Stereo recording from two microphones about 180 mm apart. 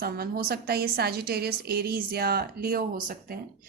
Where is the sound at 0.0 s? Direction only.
60° right (ahead or behind).